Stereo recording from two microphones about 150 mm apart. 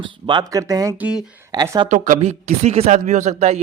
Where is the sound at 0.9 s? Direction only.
10° right (ahead or behind).